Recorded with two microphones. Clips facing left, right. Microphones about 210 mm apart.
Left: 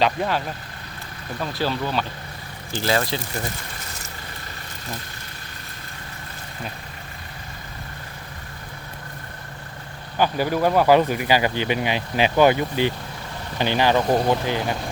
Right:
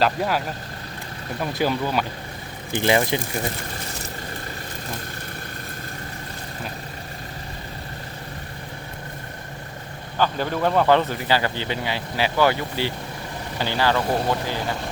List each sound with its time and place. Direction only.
0.0 s speech: 5° right (ahead or behind)
10.2 s speech: 10° left (ahead or behind)